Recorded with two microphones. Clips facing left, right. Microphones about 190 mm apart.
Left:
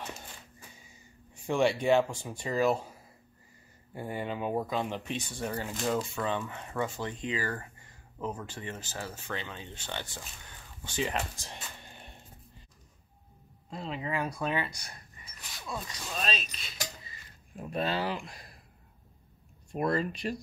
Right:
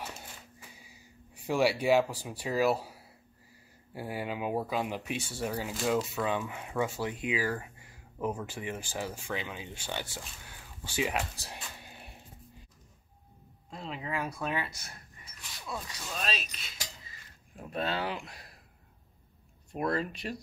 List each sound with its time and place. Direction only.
1.4 s speech: 5° right (ahead or behind)
13.7 s speech: centre (ahead or behind)
17.6 s speech: 5° left (ahead or behind)
19.7 s speech: 5° right (ahead or behind)